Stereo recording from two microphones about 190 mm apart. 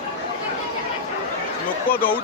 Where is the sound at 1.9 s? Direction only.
10° left (ahead or behind).